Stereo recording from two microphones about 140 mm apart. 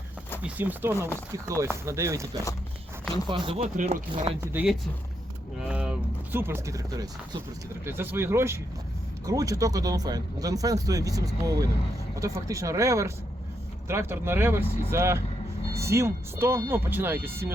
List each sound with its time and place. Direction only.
0.4 s speech: 10° right (ahead or behind)
3.2 s speech: 40° right (ahead or behind)
3.6 s speech: 60° right (ahead or behind)
4.5 s speech: 5° right (ahead or behind)